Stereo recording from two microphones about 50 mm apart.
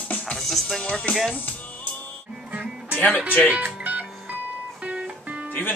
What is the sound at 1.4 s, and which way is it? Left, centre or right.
Music, left.